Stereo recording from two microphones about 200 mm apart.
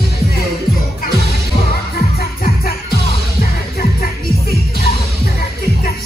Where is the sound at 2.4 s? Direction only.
50° left (ahead or behind).